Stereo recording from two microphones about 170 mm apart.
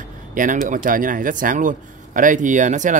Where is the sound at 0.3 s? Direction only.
50° right (ahead or behind).